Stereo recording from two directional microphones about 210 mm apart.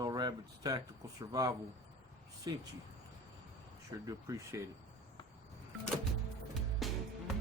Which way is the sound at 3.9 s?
15° right (ahead or behind).